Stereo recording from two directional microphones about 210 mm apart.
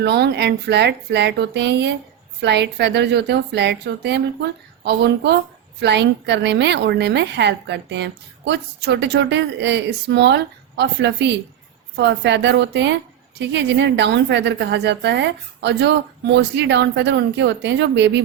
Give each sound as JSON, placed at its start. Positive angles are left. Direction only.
{"t": 0.0, "sound": "a woman's voice", "side_deg": -50}